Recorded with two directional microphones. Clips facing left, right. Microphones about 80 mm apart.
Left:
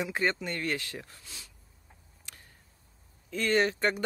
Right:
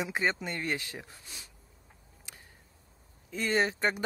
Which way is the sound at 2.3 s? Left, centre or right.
Centre.